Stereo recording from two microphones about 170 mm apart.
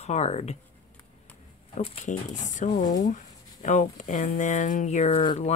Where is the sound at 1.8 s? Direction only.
45° left (ahead or behind).